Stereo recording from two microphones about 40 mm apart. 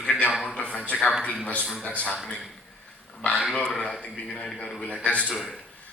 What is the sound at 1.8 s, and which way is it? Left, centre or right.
Speech, left.